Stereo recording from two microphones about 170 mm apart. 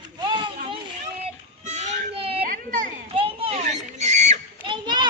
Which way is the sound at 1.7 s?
40° right (ahead or behind).